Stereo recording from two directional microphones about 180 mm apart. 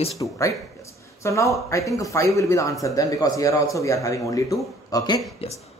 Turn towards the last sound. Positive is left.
turn(degrees=35)  # may be behind; listen again after turning